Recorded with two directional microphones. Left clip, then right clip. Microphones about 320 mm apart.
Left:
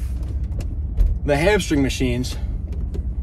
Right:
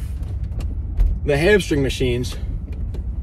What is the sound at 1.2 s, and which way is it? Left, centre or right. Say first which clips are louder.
Speech: right 2 dB; centre.